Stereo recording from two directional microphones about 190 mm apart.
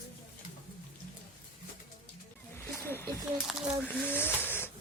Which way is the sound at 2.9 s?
10° left (ahead or behind).